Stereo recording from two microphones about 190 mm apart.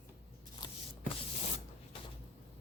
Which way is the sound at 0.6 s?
20° left (ahead or behind).